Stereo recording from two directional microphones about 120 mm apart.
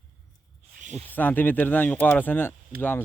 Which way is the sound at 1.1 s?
15° left (ahead or behind).